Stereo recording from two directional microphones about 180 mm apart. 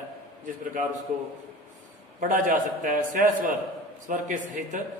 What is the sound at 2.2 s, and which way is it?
A man's voice, 45° right (ahead or behind).